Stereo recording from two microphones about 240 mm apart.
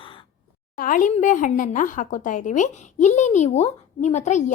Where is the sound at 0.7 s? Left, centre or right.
Left.